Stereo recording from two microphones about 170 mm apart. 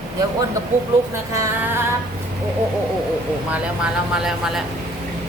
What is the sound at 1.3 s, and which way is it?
Speech, 20° right (ahead or behind).